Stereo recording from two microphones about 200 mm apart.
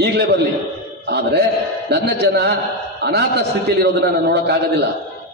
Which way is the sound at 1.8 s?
55° right (ahead or behind).